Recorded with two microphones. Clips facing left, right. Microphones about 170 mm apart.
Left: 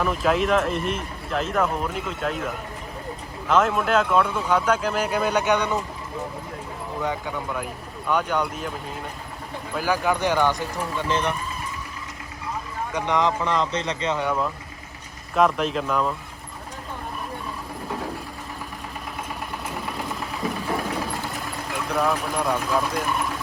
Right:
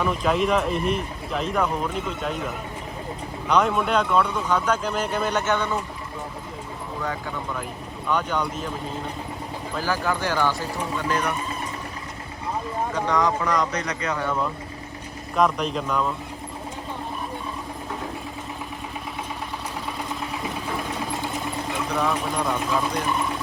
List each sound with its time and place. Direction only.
0.0 s speech: centre (ahead or behind)
3.5 s speech: centre (ahead or behind)
8.0 s speech: 10° left (ahead or behind)
9.7 s speech: 15° left (ahead or behind)
13.1 s speech: 20° left (ahead or behind)
15.4 s speech: centre (ahead or behind)
21.7 s speech: centre (ahead or behind)